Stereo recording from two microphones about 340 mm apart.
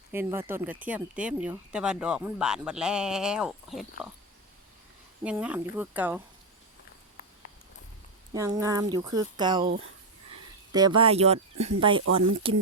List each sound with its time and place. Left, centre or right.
0.1 s speech: centre
5.2 s speech: centre
8.3 s speech: centre
9.6 s speech: right
10.7 s speech: centre